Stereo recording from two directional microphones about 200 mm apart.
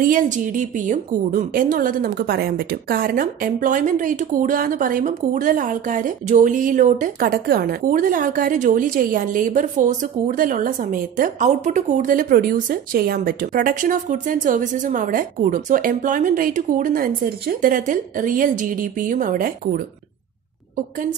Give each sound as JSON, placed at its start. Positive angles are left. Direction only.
{"t": 0.0, "sound": "a woman's voice", "side_deg": -40}